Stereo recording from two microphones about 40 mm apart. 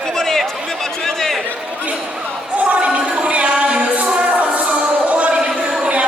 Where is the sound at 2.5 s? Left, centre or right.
Right.